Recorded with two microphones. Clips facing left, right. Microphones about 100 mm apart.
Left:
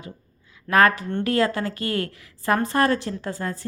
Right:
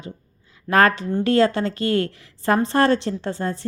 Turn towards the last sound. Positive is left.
turn(degrees=-25)  # may be behind; listen again after turning